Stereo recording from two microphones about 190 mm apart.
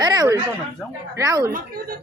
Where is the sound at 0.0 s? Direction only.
20° right (ahead or behind).